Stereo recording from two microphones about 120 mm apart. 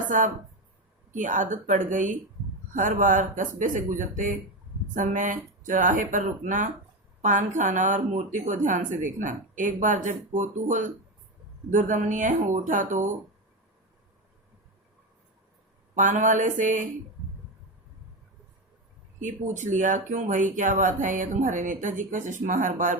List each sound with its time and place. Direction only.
1.1 s a woman's voice: 90° right
16.0 s a woman's voice: 90° right
19.2 s a woman's voice: 90° right